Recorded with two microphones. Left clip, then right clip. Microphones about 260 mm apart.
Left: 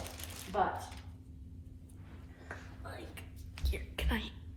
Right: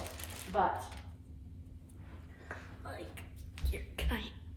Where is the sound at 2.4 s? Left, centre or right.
Centre.